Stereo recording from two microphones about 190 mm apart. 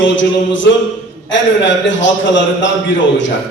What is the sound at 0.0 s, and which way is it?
A man's voice, 75° left (ahead or behind).